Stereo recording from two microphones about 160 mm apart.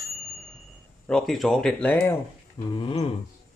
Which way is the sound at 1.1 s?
5° left (ahead or behind).